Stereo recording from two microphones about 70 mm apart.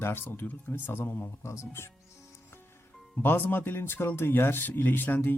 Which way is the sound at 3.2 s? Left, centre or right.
Left.